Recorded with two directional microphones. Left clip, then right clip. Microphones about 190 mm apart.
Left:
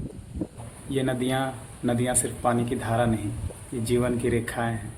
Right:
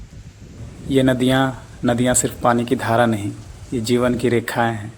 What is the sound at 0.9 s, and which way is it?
A man's voice, 40° right (ahead or behind).